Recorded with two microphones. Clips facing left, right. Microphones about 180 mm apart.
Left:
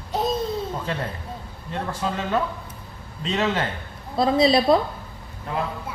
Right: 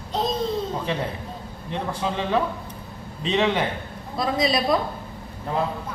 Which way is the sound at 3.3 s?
15° right (ahead or behind).